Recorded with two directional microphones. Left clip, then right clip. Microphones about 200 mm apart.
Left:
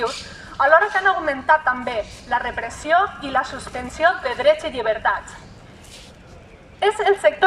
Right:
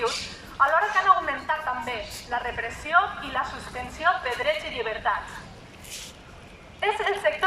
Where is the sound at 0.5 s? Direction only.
50° left (ahead or behind).